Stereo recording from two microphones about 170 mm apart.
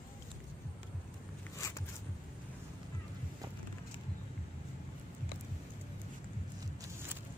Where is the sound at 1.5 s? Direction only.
15° left (ahead or behind).